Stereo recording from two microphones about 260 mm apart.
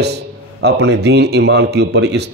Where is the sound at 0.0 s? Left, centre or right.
Right.